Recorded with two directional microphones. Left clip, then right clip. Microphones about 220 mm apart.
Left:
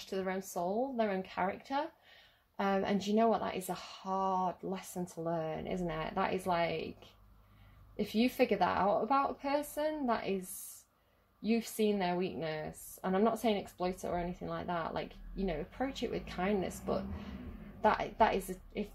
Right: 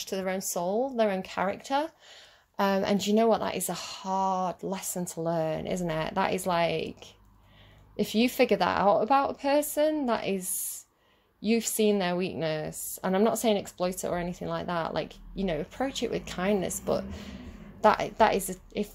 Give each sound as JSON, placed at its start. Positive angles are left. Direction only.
{"t": 0.0, "sound": "a woman's voice", "side_deg": -40}
{"t": 7.9, "sound": "a woman's voice", "side_deg": -40}
{"t": 11.4, "sound": "a woman's voice", "side_deg": -40}